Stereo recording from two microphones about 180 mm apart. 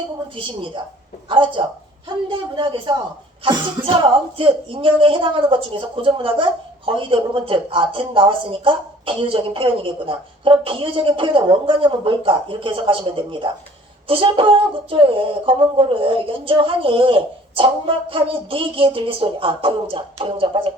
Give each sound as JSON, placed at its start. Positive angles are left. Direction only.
{"t": 1.3, "sound": "speech", "side_deg": -30}